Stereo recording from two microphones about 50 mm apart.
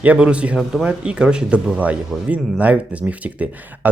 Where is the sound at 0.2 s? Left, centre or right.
Right.